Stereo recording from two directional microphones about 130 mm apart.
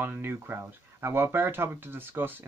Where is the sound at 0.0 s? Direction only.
15° right (ahead or behind).